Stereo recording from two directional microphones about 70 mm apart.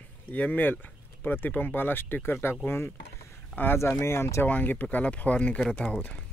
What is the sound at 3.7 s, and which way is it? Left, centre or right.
Speech, left.